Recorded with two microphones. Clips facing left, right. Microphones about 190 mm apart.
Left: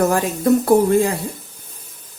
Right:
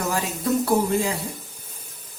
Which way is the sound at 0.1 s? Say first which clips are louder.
Left 8 dB; 55° left (ahead or behind).